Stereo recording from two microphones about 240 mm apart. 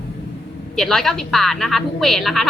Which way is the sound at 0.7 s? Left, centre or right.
Centre.